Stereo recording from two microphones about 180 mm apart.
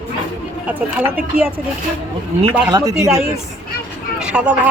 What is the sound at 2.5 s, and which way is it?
Speech, 20° right (ahead or behind).